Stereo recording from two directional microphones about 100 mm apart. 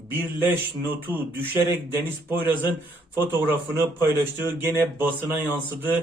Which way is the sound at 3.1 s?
20° right (ahead or behind).